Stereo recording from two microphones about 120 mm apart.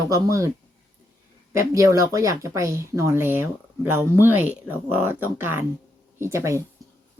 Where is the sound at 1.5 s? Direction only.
25° right (ahead or behind).